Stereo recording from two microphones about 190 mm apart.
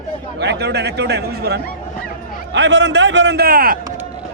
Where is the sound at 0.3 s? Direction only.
60° right (ahead or behind).